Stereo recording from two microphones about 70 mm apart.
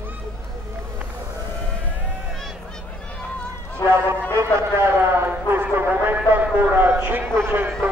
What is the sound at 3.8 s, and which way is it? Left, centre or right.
Speech, left.